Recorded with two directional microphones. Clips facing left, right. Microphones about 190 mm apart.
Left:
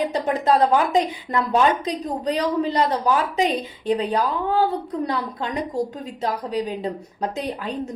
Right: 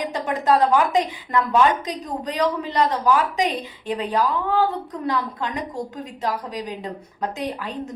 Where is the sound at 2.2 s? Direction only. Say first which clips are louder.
Left 2 dB; 30° left (ahead or behind).